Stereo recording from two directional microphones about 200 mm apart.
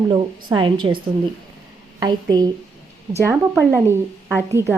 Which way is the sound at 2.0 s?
20° right (ahead or behind).